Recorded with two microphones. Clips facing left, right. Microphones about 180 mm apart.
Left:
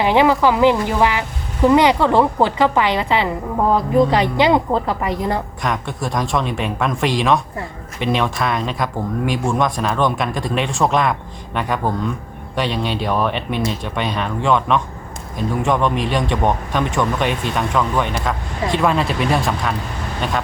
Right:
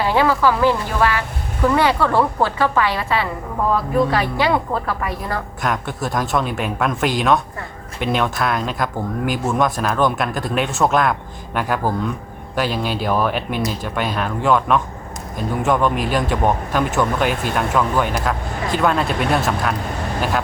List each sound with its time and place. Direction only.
0.0 s a woman's voice: 20° left (ahead or behind)
5.6 s speech: centre (ahead or behind)